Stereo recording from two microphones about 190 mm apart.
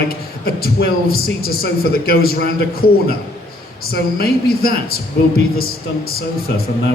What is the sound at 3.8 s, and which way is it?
A man's voice, 55° left (ahead or behind).